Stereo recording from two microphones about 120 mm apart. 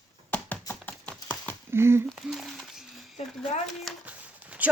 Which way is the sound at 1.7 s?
20° right (ahead or behind).